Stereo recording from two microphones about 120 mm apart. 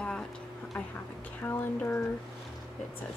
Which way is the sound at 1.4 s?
15° left (ahead or behind).